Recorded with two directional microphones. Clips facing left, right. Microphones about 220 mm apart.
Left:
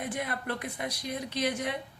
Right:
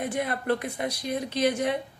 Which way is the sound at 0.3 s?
35° right (ahead or behind).